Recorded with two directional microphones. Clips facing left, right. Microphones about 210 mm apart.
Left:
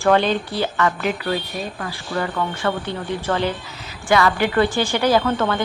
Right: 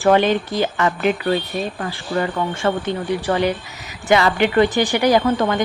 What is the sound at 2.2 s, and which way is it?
Speech, 20° right (ahead or behind).